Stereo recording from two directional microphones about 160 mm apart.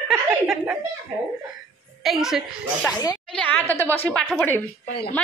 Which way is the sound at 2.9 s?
25° left (ahead or behind).